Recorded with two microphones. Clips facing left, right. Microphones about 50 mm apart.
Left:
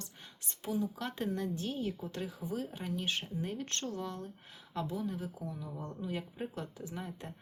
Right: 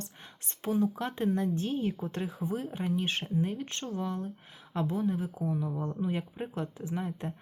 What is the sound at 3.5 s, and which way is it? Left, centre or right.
Speech, centre.